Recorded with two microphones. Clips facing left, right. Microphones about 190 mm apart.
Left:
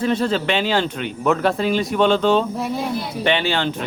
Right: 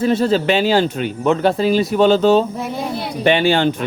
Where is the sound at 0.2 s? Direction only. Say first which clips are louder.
Right 5 dB; 40° right (ahead or behind).